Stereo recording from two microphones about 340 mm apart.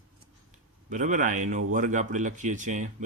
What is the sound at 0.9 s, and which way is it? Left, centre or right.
Speech, right.